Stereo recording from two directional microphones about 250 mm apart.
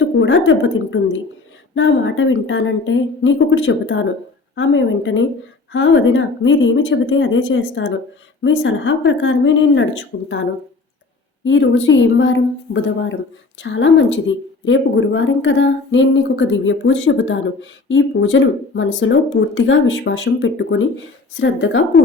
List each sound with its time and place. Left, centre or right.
0.0 s speech: left
11.4 s speech: left